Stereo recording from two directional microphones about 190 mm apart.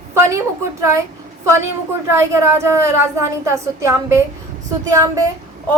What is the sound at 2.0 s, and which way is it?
A woman's voice, 15° right (ahead or behind).